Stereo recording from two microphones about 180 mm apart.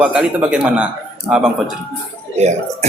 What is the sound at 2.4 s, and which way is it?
Speech, 40° right (ahead or behind).